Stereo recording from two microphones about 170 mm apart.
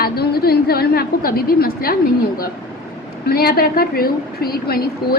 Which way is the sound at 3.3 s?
65° left (ahead or behind).